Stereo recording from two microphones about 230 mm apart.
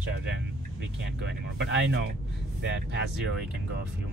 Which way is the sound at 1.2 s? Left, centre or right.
Right.